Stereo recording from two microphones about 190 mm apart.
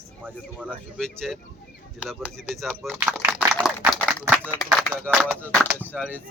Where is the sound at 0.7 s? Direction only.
5° left (ahead or behind).